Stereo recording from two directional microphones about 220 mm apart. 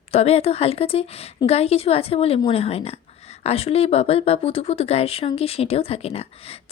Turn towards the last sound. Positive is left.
turn(degrees=25)  # may be behind; listen again after turning